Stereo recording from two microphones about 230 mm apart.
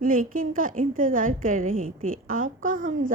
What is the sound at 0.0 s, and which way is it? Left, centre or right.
A woman's voice, right.